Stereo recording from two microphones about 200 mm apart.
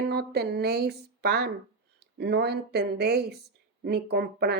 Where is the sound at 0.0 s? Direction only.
55° right (ahead or behind).